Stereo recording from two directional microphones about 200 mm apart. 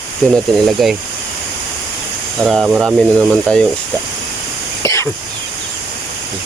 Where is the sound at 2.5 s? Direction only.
Centre (ahead or behind).